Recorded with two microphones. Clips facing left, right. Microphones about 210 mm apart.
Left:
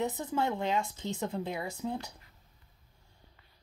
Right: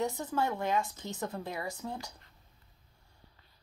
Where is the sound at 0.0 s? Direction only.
20° left (ahead or behind).